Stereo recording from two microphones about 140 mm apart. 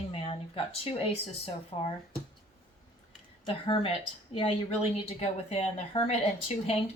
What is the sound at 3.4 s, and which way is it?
Speech, 40° left (ahead or behind).